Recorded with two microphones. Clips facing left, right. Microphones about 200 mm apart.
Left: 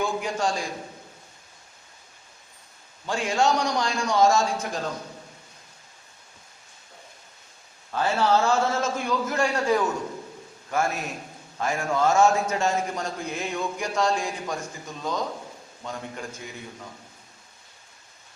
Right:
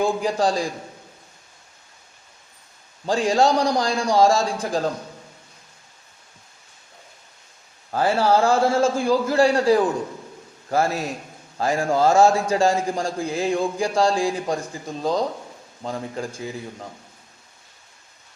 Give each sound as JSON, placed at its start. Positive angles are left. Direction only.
{"t": 0.0, "sound": "a man's voice", "side_deg": -35}
{"t": 3.1, "sound": "a man's voice", "side_deg": -35}
{"t": 7.9, "sound": "a man's voice", "side_deg": -35}